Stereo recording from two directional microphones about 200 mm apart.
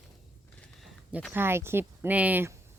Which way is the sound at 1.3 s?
10° right (ahead or behind).